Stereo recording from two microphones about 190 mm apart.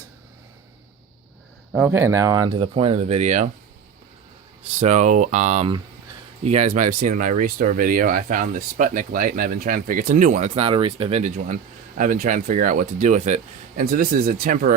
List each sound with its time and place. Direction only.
1.7 s speech: 10° right (ahead or behind); by 3.5 s 40° right (ahead or behind)
4.8 s speech: 40° right (ahead or behind)
10.5 s speech: 30° right (ahead or behind)
11.2 s speech: 40° right (ahead or behind)